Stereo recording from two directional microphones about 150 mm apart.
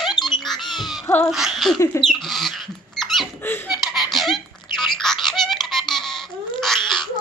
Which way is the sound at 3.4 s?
15° left (ahead or behind).